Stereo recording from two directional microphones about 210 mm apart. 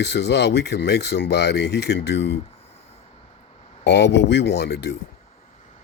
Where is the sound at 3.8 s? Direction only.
55° left (ahead or behind).